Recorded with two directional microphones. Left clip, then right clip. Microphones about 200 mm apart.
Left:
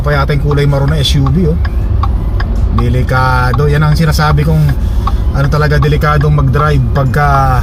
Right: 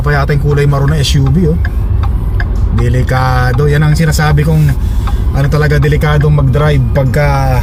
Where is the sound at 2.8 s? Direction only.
20° right (ahead or behind).